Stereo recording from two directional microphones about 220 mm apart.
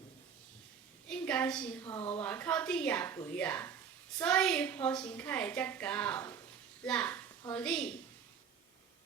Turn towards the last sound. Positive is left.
turn(degrees=5)  # may be behind; listen again after turning